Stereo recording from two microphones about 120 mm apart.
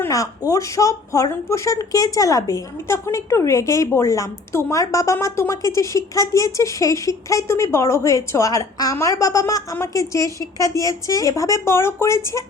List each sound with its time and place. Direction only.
0.0 s speech: 30° left (ahead or behind)